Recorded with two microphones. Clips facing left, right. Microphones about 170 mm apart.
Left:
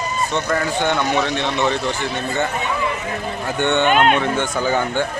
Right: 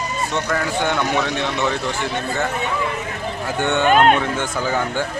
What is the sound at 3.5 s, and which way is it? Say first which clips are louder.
Speech: left 1 dB; 5° right (ahead or behind).